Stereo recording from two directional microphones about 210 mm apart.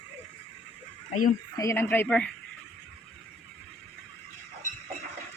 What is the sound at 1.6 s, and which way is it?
Speech, 15° left (ahead or behind).